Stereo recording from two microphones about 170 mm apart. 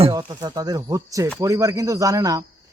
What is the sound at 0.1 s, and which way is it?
Cricket, 25° right (ahead or behind).